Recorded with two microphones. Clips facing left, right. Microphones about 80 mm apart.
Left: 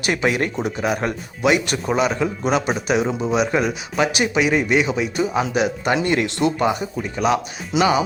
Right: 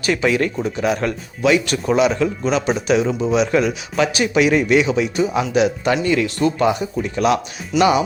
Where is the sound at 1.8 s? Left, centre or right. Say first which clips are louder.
Right 5 dB; centre.